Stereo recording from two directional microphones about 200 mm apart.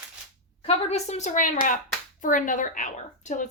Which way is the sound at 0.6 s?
35° left (ahead or behind).